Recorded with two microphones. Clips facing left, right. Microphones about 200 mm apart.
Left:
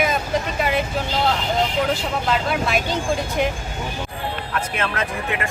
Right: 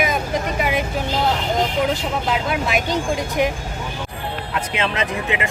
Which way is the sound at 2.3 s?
15° right (ahead or behind).